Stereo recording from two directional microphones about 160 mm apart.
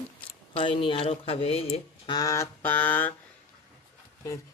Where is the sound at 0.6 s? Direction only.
30° left (ahead or behind); by 3.1 s 10° left (ahead or behind).